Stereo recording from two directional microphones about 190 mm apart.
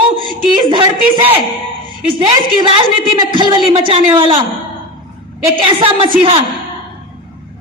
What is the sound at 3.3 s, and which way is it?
A man's voice, 25° right (ahead or behind).